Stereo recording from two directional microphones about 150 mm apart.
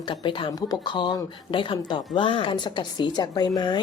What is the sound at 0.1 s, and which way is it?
A woman's voice, 35° left (ahead or behind).